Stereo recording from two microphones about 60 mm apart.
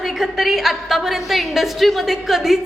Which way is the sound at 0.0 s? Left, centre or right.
Centre.